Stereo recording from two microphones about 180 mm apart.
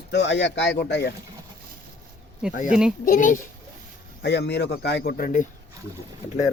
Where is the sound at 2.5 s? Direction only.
45° left (ahead or behind).